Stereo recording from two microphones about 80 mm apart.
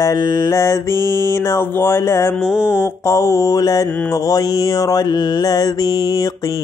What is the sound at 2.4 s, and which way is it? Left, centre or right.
Mantra, centre.